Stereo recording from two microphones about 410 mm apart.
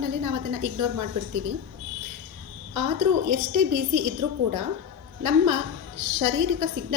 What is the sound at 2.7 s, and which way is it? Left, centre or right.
A woman's voice, right.